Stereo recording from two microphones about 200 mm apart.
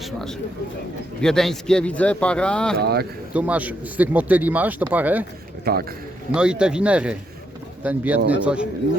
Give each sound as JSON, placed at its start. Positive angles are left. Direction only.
{"t": 0.0, "sound": "speech", "side_deg": 0}
{"t": 2.7, "sound": "speech", "side_deg": -50}
{"t": 3.3, "sound": "speech", "side_deg": -5}
{"t": 5.7, "sound": "speech", "side_deg": -50}
{"t": 6.3, "sound": "speech", "side_deg": -5}